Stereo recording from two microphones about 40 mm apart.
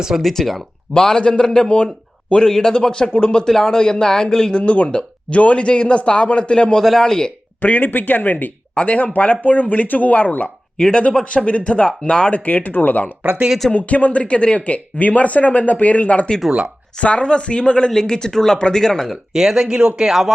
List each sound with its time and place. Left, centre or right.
0.2 s speech: centre
0.9 s a man's voice: centre
2.5 s a man's voice: centre
4.6 s a man's voice: left
6.7 s speech: centre
7.0 s speech: centre
7.6 s speech: left
8.7 s speech: left
9.1 s speech: left
10.8 s speech: left
12.3 s speech: left
13.2 s speech: right
13.7 s a man's voice: left; by 19.0 s centre
19.1 s speech: centre